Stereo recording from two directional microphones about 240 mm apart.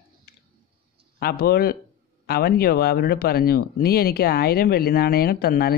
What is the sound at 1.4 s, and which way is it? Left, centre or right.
Speech, left.